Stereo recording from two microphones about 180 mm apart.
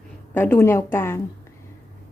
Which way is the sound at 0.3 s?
15° left (ahead or behind).